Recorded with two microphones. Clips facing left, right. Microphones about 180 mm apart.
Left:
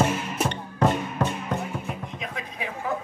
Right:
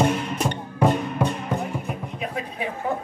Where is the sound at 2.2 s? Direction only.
35° right (ahead or behind).